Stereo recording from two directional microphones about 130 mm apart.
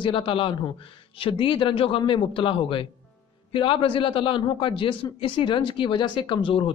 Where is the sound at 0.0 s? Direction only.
40° left (ahead or behind).